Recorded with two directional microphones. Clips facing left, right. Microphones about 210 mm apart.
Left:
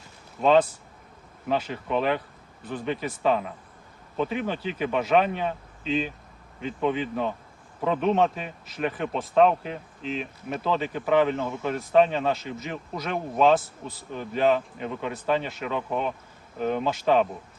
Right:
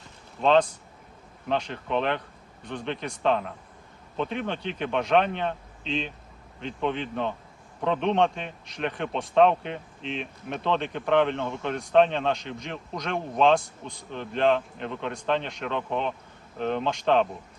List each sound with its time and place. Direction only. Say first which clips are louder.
0.4 s a man's voice: left 1 dB; 5° left (ahead or behind)